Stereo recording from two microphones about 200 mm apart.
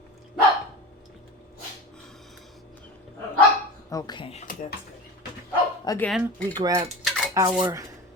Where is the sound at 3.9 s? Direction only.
20° left (ahead or behind).